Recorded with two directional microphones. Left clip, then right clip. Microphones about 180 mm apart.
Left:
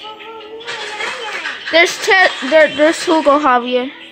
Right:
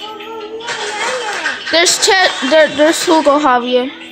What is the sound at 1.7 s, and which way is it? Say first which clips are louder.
Speech: even; 5° left (ahead or behind).